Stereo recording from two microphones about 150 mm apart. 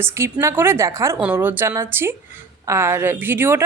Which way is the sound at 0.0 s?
15° right (ahead or behind).